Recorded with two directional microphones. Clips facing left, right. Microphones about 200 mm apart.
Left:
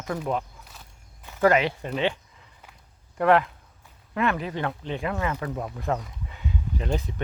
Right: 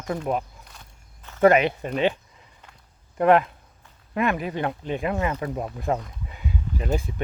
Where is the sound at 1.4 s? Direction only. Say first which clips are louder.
Right 3 dB; 20° right (ahead or behind).